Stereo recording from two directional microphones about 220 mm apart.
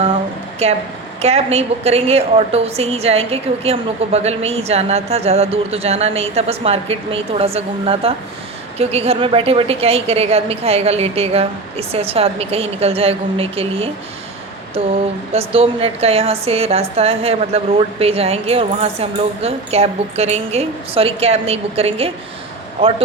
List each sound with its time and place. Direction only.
0.6 s a woman's voice: 30° right (ahead or behind)
15.3 s a woman's voice: 25° right (ahead or behind)